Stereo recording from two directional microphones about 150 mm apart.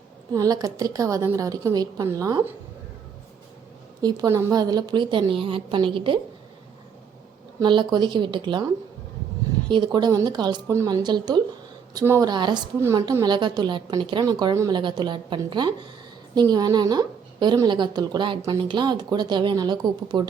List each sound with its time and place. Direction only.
0.3 s a woman's voice: 25° right (ahead or behind)
4.0 s a woman's voice: 25° right (ahead or behind)
7.6 s a woman's voice: 30° right (ahead or behind)
9.6 s a woman's voice: 30° right (ahead or behind)